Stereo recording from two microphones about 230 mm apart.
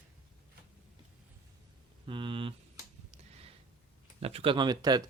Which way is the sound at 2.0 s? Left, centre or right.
Right.